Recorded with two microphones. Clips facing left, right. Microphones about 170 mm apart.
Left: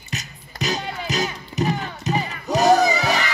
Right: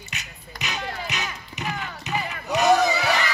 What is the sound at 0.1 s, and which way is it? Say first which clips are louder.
Music: left 10 dB; 40° left (ahead or behind).